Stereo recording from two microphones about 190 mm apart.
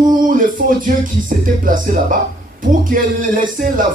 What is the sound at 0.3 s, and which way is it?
Music, 45° right (ahead or behind).